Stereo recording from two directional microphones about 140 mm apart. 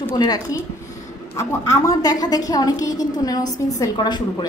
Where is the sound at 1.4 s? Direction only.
25° left (ahead or behind).